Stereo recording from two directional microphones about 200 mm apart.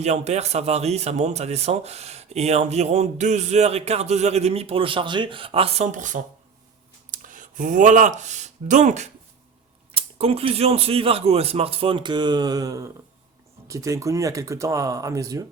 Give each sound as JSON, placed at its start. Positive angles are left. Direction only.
{"t": 0.0, "sound": "speech", "side_deg": -35}